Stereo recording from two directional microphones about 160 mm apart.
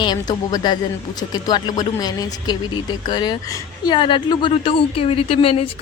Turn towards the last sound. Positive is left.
turn(degrees=35)  # may be behind; listen again after turning